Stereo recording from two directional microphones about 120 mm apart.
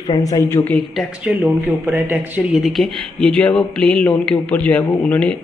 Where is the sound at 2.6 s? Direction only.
Centre (ahead or behind).